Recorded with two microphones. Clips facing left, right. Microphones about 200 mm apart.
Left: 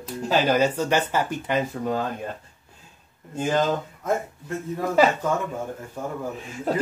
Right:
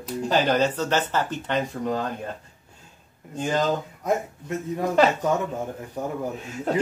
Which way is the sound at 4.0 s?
15° right (ahead or behind).